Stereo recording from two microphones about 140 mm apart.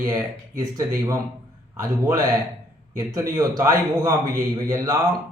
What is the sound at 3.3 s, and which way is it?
A man's voice, 25° right (ahead or behind).